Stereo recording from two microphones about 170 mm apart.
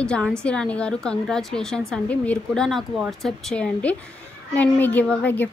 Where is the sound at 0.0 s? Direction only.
5° left (ahead or behind).